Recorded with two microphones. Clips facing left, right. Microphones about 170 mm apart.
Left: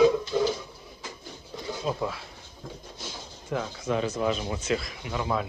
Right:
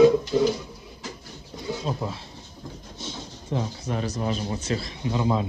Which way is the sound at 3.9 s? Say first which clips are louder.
Left 3 dB; 40° right (ahead or behind).